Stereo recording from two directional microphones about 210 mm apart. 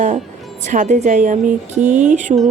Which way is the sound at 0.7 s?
35° right (ahead or behind).